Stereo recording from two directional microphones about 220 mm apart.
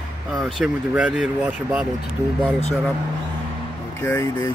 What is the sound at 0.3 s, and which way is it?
Speech, centre (ahead or behind).